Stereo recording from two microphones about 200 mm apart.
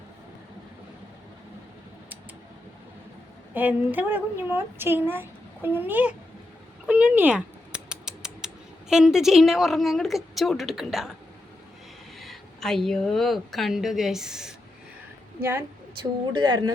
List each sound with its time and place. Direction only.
3.5 s speech: 10° right (ahead or behind)
6.8 s rodents: 5° right (ahead or behind)
8.9 s a woman's voice: 5° right (ahead or behind)
12.2 s a woman's voice: centre (ahead or behind)
16.3 s speech: 20° right (ahead or behind)